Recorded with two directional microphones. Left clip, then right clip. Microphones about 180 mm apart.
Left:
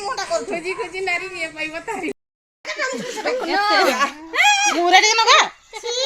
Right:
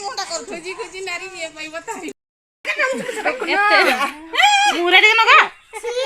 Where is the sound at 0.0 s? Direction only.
90° right.